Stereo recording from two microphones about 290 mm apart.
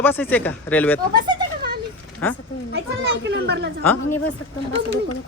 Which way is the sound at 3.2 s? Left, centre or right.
Right.